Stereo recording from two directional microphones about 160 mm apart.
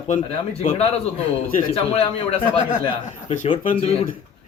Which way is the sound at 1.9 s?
35° left (ahead or behind).